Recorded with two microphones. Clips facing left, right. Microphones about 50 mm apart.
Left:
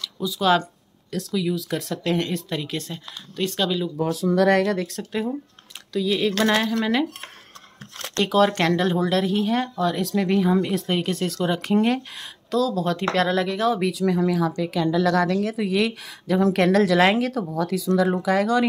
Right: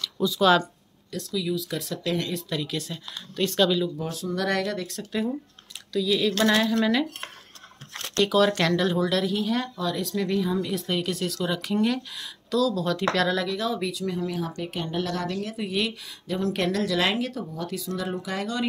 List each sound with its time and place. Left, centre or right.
0.0 s speech: centre
1.3 s speech: left
2.5 s a woman's voice: left
3.3 s speech: centre
4.4 s speech: left
5.9 s speech: left
8.2 s a woman's voice: left
10.9 s a woman's voice: left
13.6 s speech: left